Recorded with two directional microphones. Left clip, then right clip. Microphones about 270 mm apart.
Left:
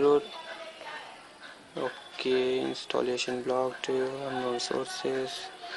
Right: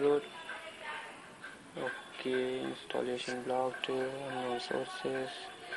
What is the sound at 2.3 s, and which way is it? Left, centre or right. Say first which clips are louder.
Speech: left 7 dB; left.